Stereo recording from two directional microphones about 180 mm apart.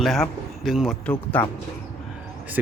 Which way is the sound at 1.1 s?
10° left (ahead or behind).